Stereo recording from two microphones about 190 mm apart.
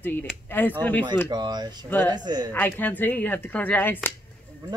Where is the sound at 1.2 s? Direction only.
20° right (ahead or behind).